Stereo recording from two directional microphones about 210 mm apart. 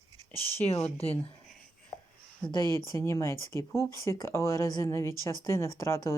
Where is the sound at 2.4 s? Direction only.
15° left (ahead or behind).